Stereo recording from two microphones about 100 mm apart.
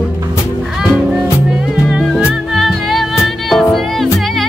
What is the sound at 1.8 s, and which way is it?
Music, centre (ahead or behind).